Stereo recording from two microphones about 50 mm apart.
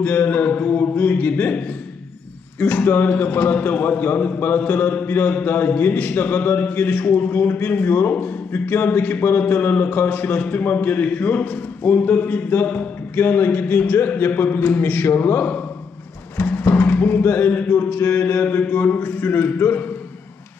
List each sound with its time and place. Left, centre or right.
0.0 s a man's voice: left
2.6 s a man's voice: left
18.6 s a man's voice: left